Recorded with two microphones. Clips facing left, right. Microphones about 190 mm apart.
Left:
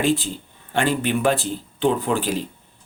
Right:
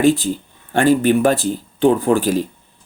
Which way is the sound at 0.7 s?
45° right (ahead or behind).